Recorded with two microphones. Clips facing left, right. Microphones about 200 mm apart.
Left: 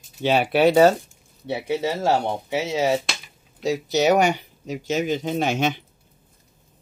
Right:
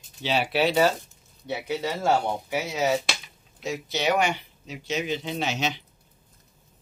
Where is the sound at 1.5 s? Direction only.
25° left (ahead or behind).